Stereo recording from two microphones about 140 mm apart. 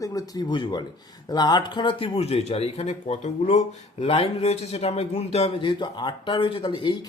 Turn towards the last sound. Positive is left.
turn(degrees=35)  # may be behind; listen again after turning